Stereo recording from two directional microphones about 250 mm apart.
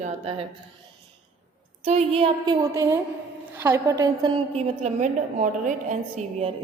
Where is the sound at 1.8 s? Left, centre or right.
Right.